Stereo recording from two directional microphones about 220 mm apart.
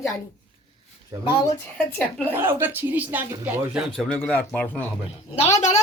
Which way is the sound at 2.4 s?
10° right (ahead or behind).